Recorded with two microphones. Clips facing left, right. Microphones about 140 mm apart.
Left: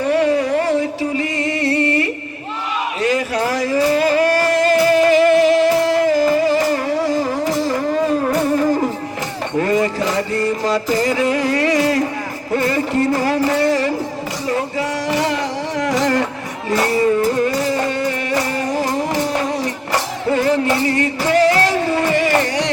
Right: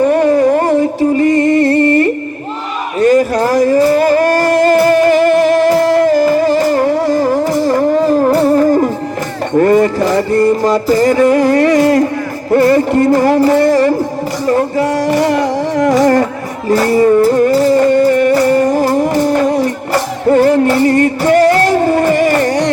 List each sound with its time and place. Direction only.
0.0 s music: 50° right (ahead or behind)
8.0 s music: 40° right (ahead or behind)
9.6 s music: 50° right (ahead or behind)
13.5 s a sound: 50° right (ahead or behind)
14.4 s music: 50° right (ahead or behind)